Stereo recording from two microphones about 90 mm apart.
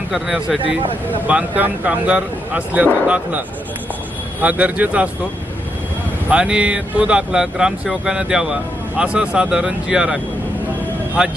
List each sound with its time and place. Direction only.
0.1 s speech: 5° right (ahead or behind)
1.3 s speech: 15° right (ahead or behind)
6.3 s speech: 10° right (ahead or behind)